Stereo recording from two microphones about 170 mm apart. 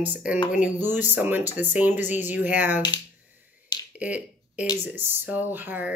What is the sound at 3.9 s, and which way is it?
Finger snapping, 5° right (ahead or behind).